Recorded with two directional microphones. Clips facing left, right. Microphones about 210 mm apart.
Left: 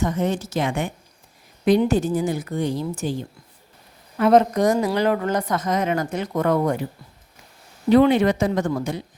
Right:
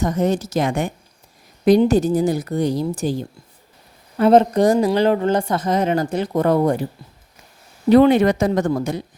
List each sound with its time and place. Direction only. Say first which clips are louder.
0.0 s a woman's voice: right 3 dB; 40° right (ahead or behind)
7.9 s a woman's voice: right 3 dB; 40° right (ahead or behind)